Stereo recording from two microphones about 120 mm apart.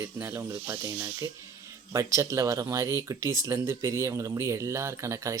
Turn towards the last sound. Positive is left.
turn(degrees=-25)  # may be behind; listen again after turning